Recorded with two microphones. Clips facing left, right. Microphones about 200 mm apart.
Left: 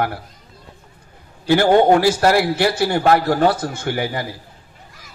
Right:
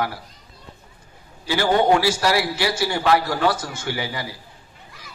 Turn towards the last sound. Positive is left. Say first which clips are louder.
# left 5 dB
turn(degrees=55)  # may be behind; listen again after turning